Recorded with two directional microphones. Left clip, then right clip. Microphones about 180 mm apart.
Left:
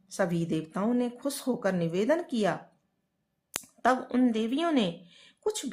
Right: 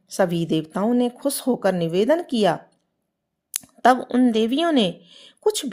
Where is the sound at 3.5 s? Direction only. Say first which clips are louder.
Right 9 dB; 30° right (ahead or behind).